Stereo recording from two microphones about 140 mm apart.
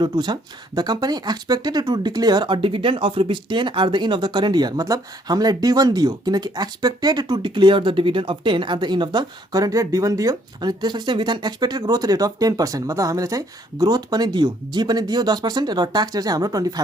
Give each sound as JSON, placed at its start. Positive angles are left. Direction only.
{"t": 0.0, "sound": "speech", "side_deg": -30}